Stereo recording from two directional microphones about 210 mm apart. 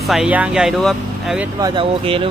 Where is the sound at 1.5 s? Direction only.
20° right (ahead or behind).